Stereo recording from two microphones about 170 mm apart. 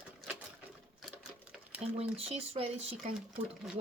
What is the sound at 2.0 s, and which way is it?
Speech, 35° right (ahead or behind).